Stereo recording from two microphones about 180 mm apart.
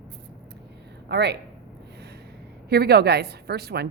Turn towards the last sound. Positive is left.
turn(degrees=-65)  # may be behind; listen again after turning